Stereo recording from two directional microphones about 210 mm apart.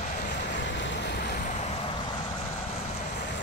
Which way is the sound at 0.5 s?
60° left (ahead or behind).